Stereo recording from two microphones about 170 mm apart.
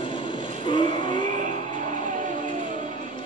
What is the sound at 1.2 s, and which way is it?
Music, 50° right (ahead or behind).